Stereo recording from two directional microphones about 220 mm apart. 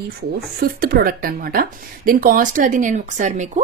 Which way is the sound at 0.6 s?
40° right (ahead or behind).